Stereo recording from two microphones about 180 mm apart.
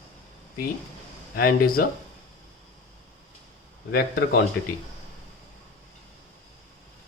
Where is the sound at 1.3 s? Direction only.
55° left (ahead or behind).